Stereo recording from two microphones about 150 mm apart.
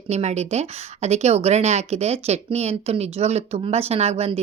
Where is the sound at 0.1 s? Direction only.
50° right (ahead or behind).